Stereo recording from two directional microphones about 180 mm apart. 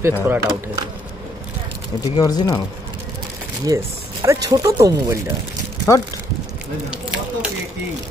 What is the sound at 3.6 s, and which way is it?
Speech, 15° right (ahead or behind).